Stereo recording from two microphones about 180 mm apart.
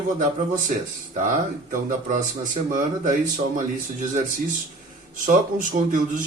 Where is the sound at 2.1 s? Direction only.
45° right (ahead or behind).